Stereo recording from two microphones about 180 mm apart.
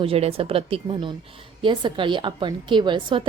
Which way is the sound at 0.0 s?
30° right (ahead or behind).